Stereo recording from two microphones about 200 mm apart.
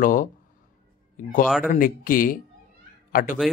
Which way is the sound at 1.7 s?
45° left (ahead or behind).